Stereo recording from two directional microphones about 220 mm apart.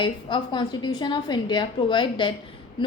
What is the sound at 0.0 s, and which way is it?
A woman's voice, 20° left (ahead or behind).